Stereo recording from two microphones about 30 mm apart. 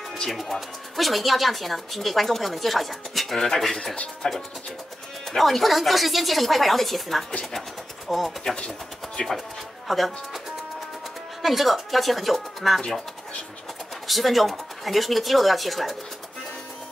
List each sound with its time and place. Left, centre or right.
0.3 s speech: centre
4.2 s speech: left
5.3 s speech: centre
8.5 s speech: left
9.8 s speech: centre
11.4 s speech: centre
14.0 s speech: centre